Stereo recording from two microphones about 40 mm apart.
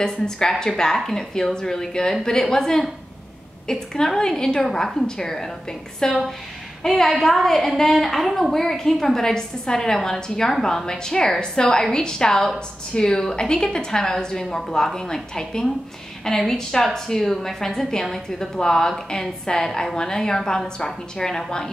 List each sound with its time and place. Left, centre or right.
0.0 s a woman's voice: centre